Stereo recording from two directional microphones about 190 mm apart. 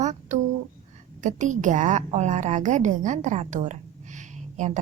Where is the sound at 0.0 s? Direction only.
40° right (ahead or behind).